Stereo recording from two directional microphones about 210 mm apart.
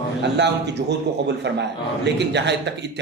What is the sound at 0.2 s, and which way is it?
A man's voice, 55° right (ahead or behind).